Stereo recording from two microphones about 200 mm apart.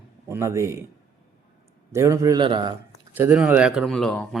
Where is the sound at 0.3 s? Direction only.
15° right (ahead or behind).